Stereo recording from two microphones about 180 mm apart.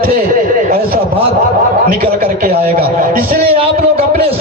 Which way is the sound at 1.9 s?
50° right (ahead or behind).